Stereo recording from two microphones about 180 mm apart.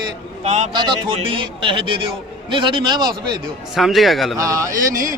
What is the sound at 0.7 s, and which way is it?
A man's voice, 25° right (ahead or behind).